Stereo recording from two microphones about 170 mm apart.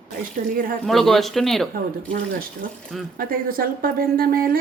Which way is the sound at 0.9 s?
Centre (ahead or behind).